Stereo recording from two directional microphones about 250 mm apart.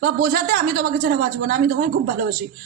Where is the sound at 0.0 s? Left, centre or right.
Right.